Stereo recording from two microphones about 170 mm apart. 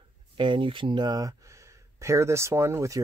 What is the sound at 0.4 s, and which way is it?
Speech, 30° right (ahead or behind).